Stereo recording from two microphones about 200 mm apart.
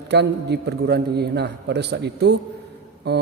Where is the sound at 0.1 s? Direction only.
60° right (ahead or behind).